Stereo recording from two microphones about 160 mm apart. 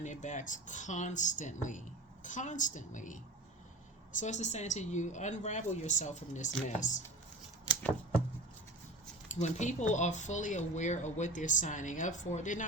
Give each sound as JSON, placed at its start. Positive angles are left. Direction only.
{"t": 0.0, "sound": "speech", "side_deg": 50}
{"t": 4.2, "sound": "speech", "side_deg": 45}
{"t": 9.3, "sound": "speech", "side_deg": 50}